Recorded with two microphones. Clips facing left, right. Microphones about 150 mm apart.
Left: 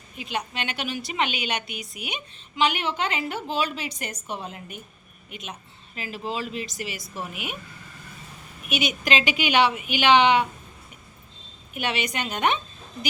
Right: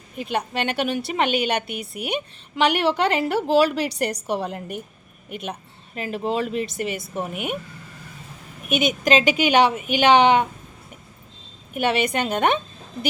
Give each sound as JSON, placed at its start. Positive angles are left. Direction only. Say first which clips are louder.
{"t": 0.2, "sound": "a woman's voice", "louder": "right 6 dB", "side_deg": -55}
{"t": 5.3, "sound": "a woman's voice", "louder": "right 8 dB", "side_deg": -55}
{"t": 8.6, "sound": "a woman's voice", "louder": "right 6 dB", "side_deg": -45}
{"t": 11.7, "sound": "a woman's voice", "louder": "right 7 dB", "side_deg": -50}